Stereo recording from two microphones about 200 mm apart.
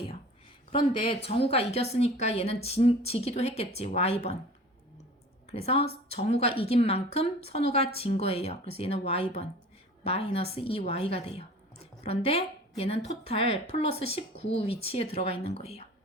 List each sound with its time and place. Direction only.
0.7 s a woman's voice: 25° left (ahead or behind)
5.5 s a woman's voice: 30° left (ahead or behind)